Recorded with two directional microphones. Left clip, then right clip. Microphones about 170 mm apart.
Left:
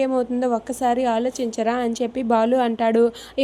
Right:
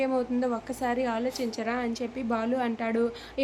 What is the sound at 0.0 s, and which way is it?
A woman's voice, 35° left (ahead or behind).